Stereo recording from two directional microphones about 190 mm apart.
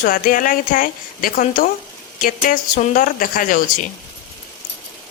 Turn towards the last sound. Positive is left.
turn(degrees=45)  # may be behind; listen again after turning